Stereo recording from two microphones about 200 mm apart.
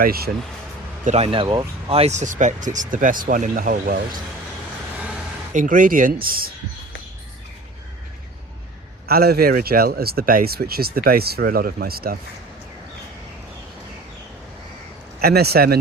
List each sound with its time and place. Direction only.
0.0 s speech: 50° right (ahead or behind)
1.0 s speech: 30° right (ahead or behind)
5.5 s speech: 40° right (ahead or behind)
9.0 s speech: 50° right (ahead or behind)
15.2 s speech: 50° right (ahead or behind)